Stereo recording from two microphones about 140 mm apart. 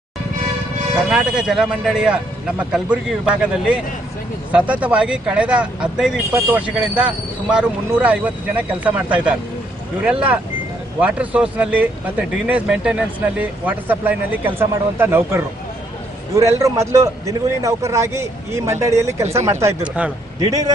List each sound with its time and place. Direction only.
1.1 s a man's voice: 5° right (ahead or behind); by 19.8 s 20° right (ahead or behind)